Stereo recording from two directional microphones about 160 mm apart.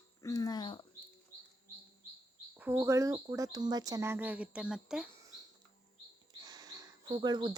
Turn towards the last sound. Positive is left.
turn(degrees=-25)  # may be behind; listen again after turning